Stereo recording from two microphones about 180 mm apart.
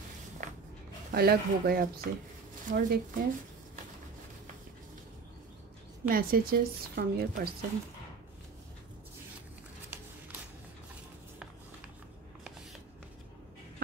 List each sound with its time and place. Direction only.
0.4 s a sound: 45° right (ahead or behind)
1.1 s a woman's voice: 60° right (ahead or behind)
6.0 s a woman's voice: 55° right (ahead or behind)